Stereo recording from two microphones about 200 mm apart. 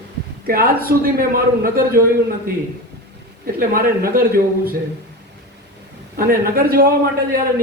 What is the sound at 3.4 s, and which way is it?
A man's voice, 45° right (ahead or behind).